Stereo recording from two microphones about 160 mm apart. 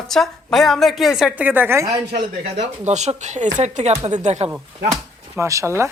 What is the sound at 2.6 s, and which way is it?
Speech, 45° right (ahead or behind).